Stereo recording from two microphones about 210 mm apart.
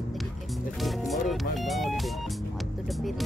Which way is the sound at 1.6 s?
Centre (ahead or behind).